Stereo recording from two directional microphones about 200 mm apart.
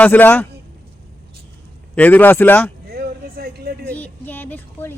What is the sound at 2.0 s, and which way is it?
Speech, 10° left (ahead or behind).